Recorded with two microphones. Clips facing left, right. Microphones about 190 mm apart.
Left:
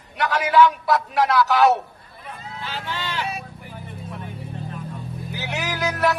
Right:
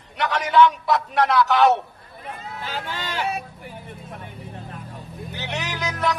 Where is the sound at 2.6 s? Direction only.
45° right (ahead or behind).